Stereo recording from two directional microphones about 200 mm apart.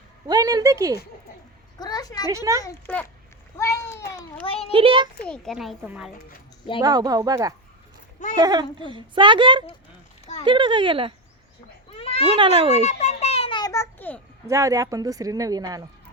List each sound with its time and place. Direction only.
0.3 s speech: 20° right (ahead or behind)
1.8 s a woman's voice: 20° left (ahead or behind)
2.3 s speech: 15° right (ahead or behind)
2.6 s a child's voice: 10° left (ahead or behind)
4.4 s a woman's voice: 30° left (ahead or behind)
4.7 s a woman's voice: 25° right (ahead or behind)
5.3 s speech: centre (ahead or behind)
6.8 s a woman's voice: 20° right (ahead or behind)
11.9 s cat: 30° left (ahead or behind)
12.2 s a woman's voice: 25° right (ahead or behind)
12.8 s a sound: 35° left (ahead or behind); by 14.2 s 10° left (ahead or behind)
14.4 s speech: 15° right (ahead or behind)